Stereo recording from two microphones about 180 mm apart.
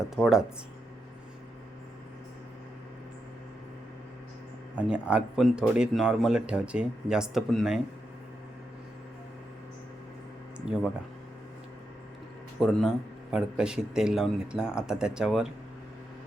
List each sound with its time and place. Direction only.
0.2 s speech: centre (ahead or behind)
4.7 s speech: 5° right (ahead or behind)
10.6 s speech: 5° right (ahead or behind)
12.5 s speech: centre (ahead or behind)